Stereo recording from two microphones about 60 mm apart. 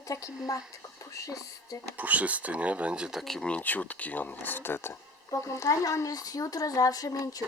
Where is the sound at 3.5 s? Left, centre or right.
Left.